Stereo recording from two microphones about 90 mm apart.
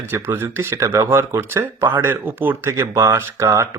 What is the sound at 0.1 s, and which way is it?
Speech, 25° right (ahead or behind).